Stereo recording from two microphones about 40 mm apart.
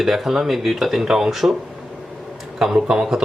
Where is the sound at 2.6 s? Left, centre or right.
Centre.